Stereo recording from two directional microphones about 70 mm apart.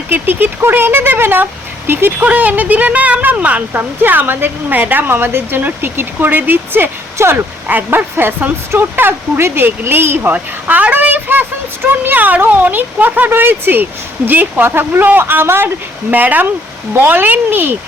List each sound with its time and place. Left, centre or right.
0.1 s speech: right
2.1 s speech: right
10.3 s speech: right